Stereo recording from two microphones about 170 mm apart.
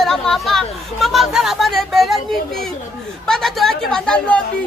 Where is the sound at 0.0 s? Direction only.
Centre (ahead or behind).